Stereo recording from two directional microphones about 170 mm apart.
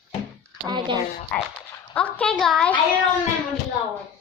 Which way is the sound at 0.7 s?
25° right (ahead or behind).